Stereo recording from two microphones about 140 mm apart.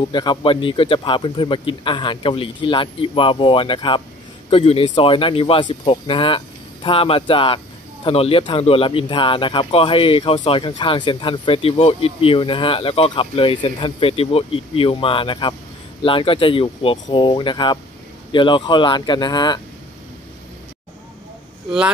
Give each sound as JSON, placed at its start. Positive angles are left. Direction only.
{"t": 0.1, "sound": "speech", "side_deg": 35}